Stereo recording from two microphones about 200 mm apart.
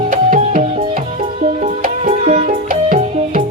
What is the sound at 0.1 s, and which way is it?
Music, 40° right (ahead or behind).